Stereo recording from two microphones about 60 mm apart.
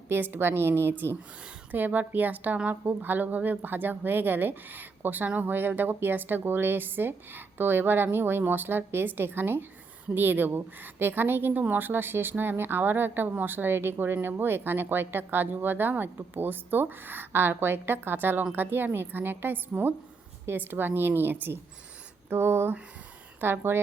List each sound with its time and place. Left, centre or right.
0.1 s speech: right
1.7 s a woman's voice: right
22.3 s a sound: right
23.4 s speech: right